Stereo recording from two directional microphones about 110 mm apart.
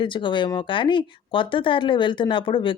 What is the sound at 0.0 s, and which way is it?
Speech, 45° left (ahead or behind).